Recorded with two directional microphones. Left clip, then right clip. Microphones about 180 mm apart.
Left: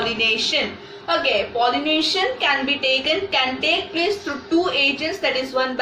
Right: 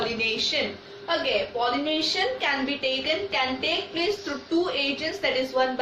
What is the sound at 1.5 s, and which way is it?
A woman's voice, 15° right (ahead or behind).